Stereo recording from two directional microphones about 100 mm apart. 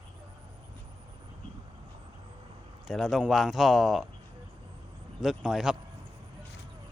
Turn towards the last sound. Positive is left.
turn(degrees=-5)  # may be behind; listen again after turning